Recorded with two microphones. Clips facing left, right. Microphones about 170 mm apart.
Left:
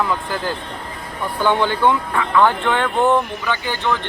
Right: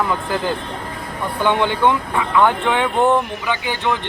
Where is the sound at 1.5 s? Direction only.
20° right (ahead or behind).